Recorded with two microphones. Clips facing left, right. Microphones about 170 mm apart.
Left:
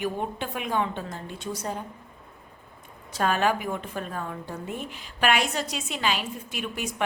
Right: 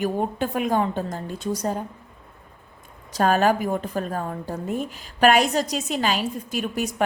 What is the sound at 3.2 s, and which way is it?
A woman's voice, 40° right (ahead or behind).